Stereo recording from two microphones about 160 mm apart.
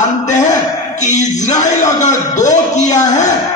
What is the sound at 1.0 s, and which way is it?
Speech, 50° left (ahead or behind).